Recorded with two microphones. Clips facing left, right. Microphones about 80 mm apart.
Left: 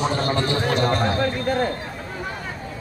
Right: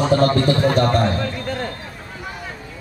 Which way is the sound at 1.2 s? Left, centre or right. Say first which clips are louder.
Left 4 dB; left.